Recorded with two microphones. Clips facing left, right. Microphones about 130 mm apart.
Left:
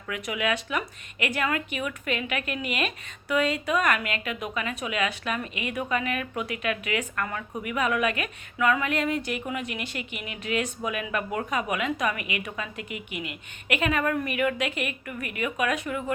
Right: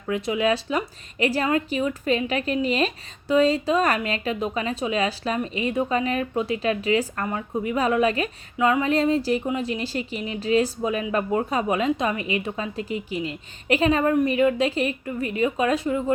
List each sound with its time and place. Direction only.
0.1 s a woman's voice: 30° right (ahead or behind)